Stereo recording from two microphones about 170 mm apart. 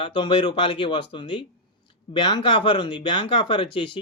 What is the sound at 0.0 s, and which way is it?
Speech, 30° left (ahead or behind).